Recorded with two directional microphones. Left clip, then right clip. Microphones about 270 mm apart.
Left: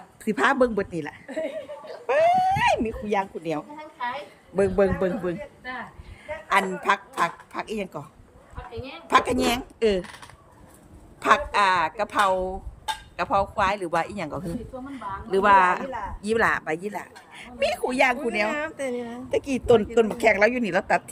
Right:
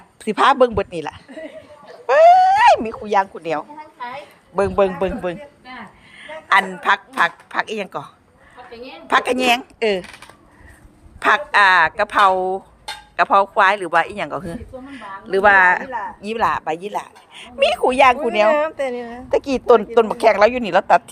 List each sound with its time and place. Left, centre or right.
0.3 s speech: centre
1.3 s chuckle: centre
2.0 s a sound: centre
4.9 s a woman's voice: centre
9.0 s speech: centre
11.2 s speech: centre
19.8 s speech: right